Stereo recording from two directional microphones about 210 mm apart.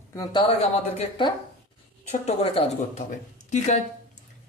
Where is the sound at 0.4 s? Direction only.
30° left (ahead or behind).